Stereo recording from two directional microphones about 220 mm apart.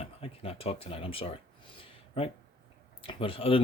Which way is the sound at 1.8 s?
25° left (ahead or behind).